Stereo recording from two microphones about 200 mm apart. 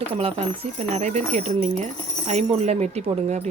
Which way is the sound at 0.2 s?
30° right (ahead or behind).